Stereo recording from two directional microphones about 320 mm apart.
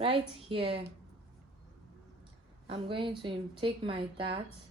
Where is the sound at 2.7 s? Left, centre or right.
Centre.